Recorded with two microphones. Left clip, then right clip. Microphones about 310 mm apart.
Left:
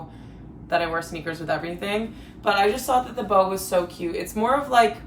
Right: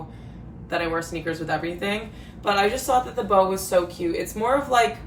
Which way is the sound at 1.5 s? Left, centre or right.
Centre.